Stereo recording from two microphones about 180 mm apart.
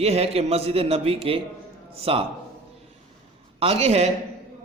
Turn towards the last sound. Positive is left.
turn(degrees=-35)  # may be behind; listen again after turning